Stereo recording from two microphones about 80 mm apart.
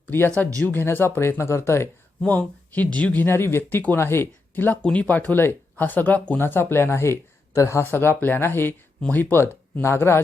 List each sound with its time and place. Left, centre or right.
0.6 s speech: left
2.2 s speech: centre
3.2 s speech: left
7.8 s speech: left
9.0 s speech: centre
9.3 s speech: left